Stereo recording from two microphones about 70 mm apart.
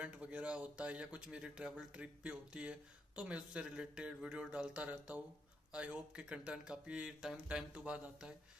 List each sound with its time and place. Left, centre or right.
0.0 s speech: centre